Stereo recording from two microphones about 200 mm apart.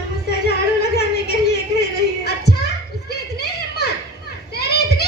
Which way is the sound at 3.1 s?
55° left (ahead or behind).